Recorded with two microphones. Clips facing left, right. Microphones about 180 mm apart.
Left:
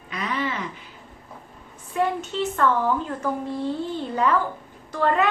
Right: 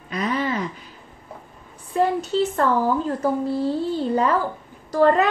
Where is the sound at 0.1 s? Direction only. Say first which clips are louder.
Right 4 dB; 40° right (ahead or behind).